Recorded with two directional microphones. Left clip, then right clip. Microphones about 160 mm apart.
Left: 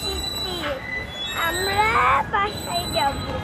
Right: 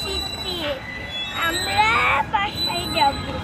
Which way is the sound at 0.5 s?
20° left (ahead or behind).